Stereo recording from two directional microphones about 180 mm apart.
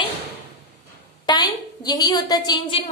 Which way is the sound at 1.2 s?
25° left (ahead or behind).